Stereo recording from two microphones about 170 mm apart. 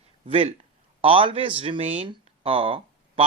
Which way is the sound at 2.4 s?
35° right (ahead or behind).